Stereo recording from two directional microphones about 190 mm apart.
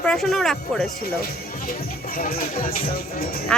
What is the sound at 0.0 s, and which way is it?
Speech, 5° left (ahead or behind).